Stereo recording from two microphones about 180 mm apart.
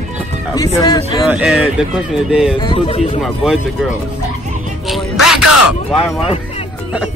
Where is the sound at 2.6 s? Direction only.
30° left (ahead or behind).